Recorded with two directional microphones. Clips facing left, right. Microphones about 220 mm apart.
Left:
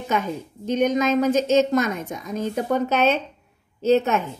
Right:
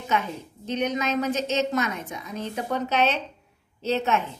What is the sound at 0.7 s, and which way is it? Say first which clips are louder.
A woman's voice: left 6 dB; 50° left (ahead or behind).